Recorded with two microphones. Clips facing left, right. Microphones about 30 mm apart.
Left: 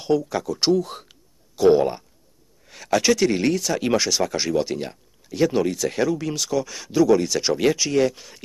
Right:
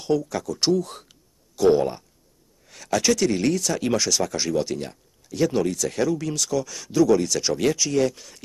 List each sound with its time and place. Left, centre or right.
0.0 s speech: centre